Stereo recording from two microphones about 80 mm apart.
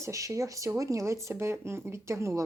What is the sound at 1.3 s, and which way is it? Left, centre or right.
Speech, right.